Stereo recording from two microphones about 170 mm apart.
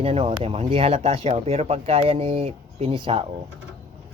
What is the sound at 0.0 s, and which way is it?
Speech, 35° right (ahead or behind).